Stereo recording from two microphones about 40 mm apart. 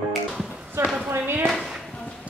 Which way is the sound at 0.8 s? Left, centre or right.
Right.